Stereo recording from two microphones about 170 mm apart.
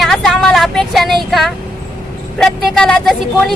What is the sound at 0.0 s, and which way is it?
Vehicle, centre (ahead or behind).